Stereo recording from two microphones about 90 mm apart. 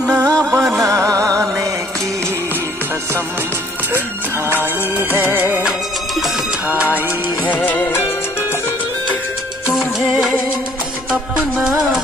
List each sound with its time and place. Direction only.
0.0 s music: 15° right (ahead or behind)
1.3 s music: 35° right (ahead or behind)
5.1 s music: 25° right (ahead or behind)
5.7 s music: centre (ahead or behind)
6.7 s music: 20° right (ahead or behind)
7.4 s music: 20° left (ahead or behind)
9.7 s music: centre (ahead or behind)
11.1 s music: 10° right (ahead or behind)